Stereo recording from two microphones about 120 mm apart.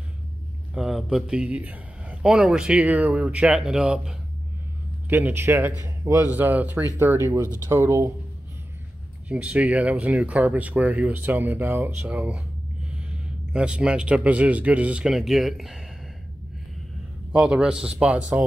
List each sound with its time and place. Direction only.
0.7 s speech: 5° right (ahead or behind)
5.1 s speech: 20° right (ahead or behind)
9.3 s speech: 10° right (ahead or behind)
17.3 s speech: 10° right (ahead or behind)